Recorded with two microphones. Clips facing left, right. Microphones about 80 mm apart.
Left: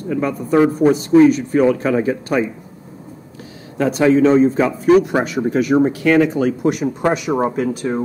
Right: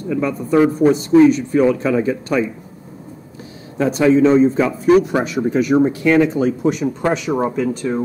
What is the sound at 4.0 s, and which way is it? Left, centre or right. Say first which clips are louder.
Speech: even; centre.